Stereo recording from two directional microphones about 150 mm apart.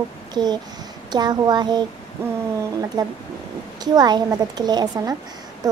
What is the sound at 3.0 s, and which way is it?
A child's voice, 25° right (ahead or behind).